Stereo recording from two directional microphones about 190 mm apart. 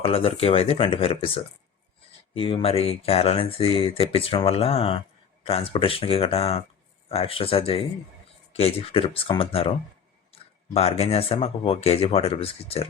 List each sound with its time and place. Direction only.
0.0 s speech: 30° left (ahead or behind)
2.4 s speech: 30° left (ahead or behind)